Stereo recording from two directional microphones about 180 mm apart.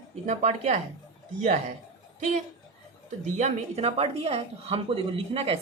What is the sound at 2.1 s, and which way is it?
Speech, 40° right (ahead or behind).